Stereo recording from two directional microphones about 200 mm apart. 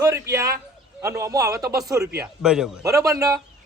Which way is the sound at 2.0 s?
50° right (ahead or behind).